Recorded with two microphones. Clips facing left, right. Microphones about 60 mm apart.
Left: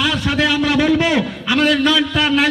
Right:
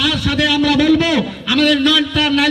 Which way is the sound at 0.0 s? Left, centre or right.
Centre.